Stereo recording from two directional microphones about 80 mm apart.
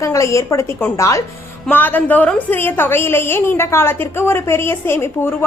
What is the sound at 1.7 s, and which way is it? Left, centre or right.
A woman's voice, left.